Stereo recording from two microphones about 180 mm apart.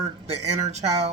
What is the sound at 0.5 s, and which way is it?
Speech, 35° right (ahead or behind).